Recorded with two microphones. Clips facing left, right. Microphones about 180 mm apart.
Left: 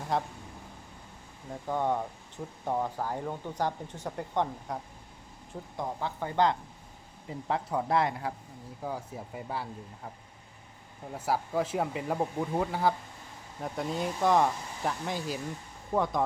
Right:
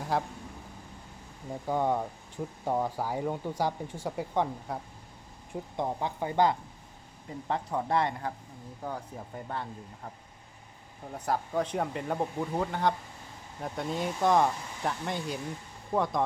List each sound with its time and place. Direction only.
0.1 s speech: 5° right (ahead or behind)
1.6 s speech: 10° right (ahead or behind)
5.7 s speech: 20° right (ahead or behind)
7.4 s speech: centre (ahead or behind)
11.1 s speech: 5° left (ahead or behind)